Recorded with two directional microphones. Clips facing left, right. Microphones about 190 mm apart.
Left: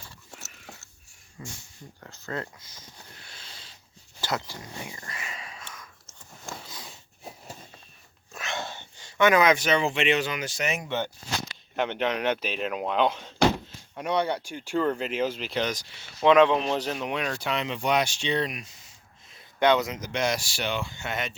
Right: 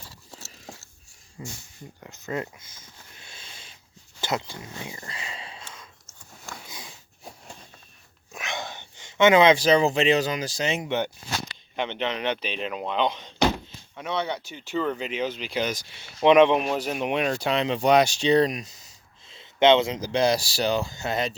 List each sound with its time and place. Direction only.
0.3 s a sound: 30° right (ahead or behind)
1.4 s speech: 20° right (ahead or behind)
3.2 s a sound: 20° right (ahead or behind)
6.7 s a sound: 15° right (ahead or behind)
8.3 s speech: 15° right (ahead or behind)
10.8 s speech: 15° right (ahead or behind)
11.8 s speech: 5° left (ahead or behind)
16.2 s speech: 20° right (ahead or behind); by 18.9 s 40° right (ahead or behind)
19.3 s speech: 25° right (ahead or behind)